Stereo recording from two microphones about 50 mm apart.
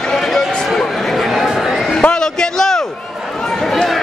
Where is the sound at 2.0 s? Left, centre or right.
Centre.